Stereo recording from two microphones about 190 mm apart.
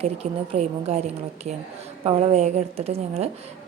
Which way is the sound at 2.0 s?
35° right (ahead or behind).